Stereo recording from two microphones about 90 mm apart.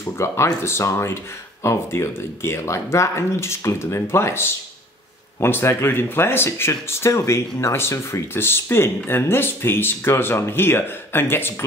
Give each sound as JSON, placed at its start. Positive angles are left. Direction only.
{"t": 0.0, "sound": "speech", "side_deg": 30}